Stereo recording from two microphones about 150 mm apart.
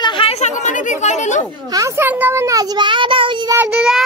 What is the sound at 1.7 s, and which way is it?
A child's voice, 20° right (ahead or behind).